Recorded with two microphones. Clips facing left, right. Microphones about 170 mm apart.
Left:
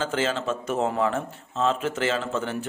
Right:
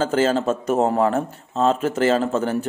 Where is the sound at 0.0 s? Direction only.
40° right (ahead or behind).